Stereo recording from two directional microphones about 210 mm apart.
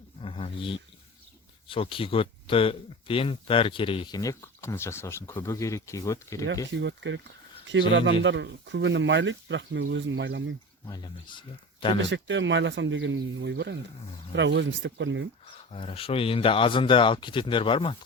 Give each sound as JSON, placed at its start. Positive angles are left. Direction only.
{"t": 0.2, "sound": "a sound", "side_deg": 25}
{"t": 1.6, "sound": "speech", "side_deg": 25}
{"t": 6.7, "sound": "speech", "side_deg": -60}
{"t": 10.8, "sound": "speech", "side_deg": 20}
{"t": 12.0, "sound": "speech", "side_deg": -60}
{"t": 15.4, "sound": "speech", "side_deg": 25}